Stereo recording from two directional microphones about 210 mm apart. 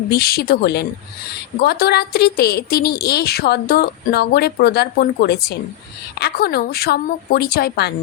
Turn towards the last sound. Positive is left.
turn(degrees=50)  # may be behind; listen again after turning